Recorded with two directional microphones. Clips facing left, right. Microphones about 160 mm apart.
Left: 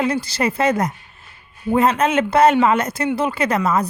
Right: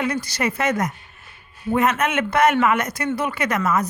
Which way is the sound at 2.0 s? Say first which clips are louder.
Left 4 dB; 30° left (ahead or behind).